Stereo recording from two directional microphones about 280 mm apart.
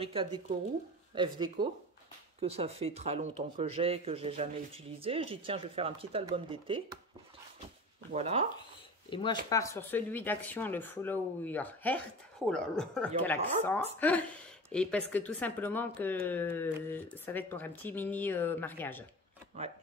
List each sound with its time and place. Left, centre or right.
0.0 s speech: centre
8.1 s speech: right
9.1 s speech: centre
19.6 s speech: right